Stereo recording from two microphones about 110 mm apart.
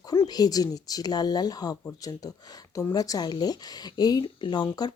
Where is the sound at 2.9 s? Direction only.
35° left (ahead or behind).